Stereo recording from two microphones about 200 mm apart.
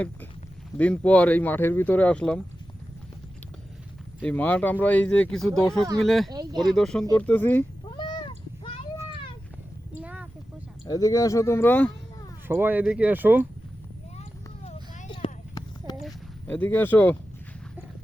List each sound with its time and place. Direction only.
0.8 s speech: 5° left (ahead or behind)
4.2 s speech: 5° left (ahead or behind)
6.3 s speech: 20° right (ahead or behind)
6.7 s speech: centre (ahead or behind)
7.9 s cat: 25° left (ahead or behind)
9.9 s a sound: 5° right (ahead or behind)
10.8 s speech: 20° left (ahead or behind)
12.5 s speech: 10° right (ahead or behind)
14.2 s clip-clop: 30° left (ahead or behind)
16.0 s speech: 10° left (ahead or behind)